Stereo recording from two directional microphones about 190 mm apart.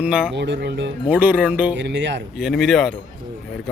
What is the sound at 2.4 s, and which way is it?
Speech, centre (ahead or behind).